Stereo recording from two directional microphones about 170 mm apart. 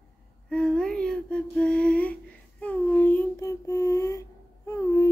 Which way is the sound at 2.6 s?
10° left (ahead or behind).